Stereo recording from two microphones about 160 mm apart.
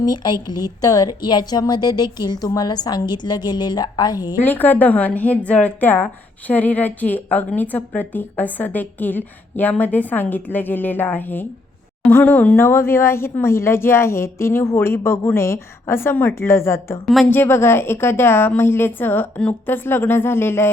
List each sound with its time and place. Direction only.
0.0 s a woman's voice: 25° left (ahead or behind)
4.4 s a woman's voice: 10° left (ahead or behind)